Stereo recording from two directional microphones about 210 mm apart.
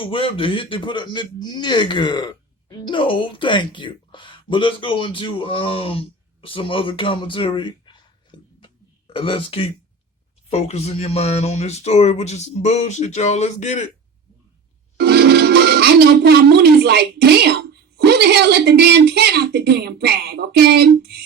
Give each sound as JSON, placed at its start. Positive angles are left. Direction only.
{"t": 0.0, "sound": "a man's voice", "side_deg": 25}
{"t": 14.9, "sound": "speech", "side_deg": -50}